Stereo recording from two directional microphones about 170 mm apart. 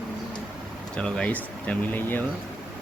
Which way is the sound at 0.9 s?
5° left (ahead or behind).